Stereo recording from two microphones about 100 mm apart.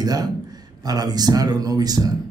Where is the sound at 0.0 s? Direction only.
40° right (ahead or behind).